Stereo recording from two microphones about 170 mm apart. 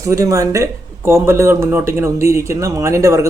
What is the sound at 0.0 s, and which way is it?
Speech, 20° right (ahead or behind).